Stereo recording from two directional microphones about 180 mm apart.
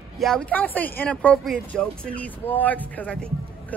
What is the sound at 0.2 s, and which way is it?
Speech, 5° left (ahead or behind).